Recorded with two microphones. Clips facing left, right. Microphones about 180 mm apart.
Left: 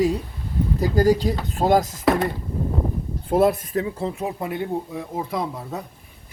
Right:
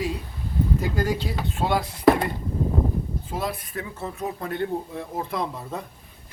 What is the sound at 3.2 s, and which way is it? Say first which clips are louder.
Speech: left 11 dB; 55° left (ahead or behind).